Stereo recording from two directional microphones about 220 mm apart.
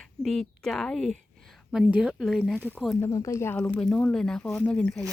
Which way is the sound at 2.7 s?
Centre (ahead or behind).